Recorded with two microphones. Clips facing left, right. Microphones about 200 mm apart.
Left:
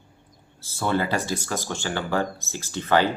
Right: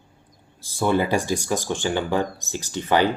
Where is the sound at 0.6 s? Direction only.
15° right (ahead or behind).